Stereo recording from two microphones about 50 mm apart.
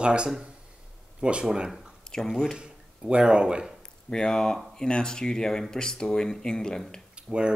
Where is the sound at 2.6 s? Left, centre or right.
Centre.